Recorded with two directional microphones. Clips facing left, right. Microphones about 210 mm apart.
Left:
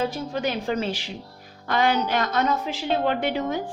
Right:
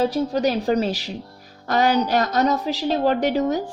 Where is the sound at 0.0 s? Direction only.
35° right (ahead or behind).